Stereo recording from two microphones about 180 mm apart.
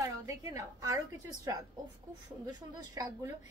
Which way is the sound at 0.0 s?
20° right (ahead or behind).